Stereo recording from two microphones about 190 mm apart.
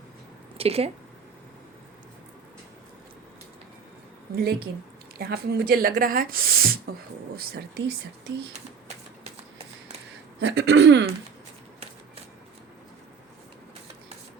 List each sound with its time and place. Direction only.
0.5 s speech: 30° right (ahead or behind)
4.4 s speech: 50° right (ahead or behind)
10.4 s speech: 65° right (ahead or behind)